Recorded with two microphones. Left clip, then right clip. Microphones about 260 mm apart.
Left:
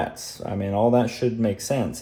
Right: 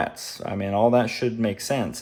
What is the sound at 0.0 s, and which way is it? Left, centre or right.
Speech, right.